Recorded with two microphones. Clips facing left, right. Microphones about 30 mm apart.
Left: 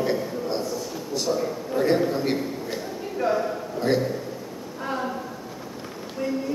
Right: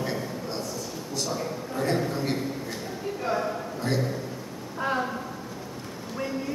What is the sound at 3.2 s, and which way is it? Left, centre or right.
Speech, centre.